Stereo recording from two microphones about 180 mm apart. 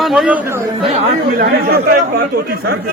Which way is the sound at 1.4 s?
60° right (ahead or behind).